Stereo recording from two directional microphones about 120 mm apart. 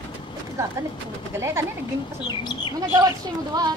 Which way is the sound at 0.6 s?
25° right (ahead or behind).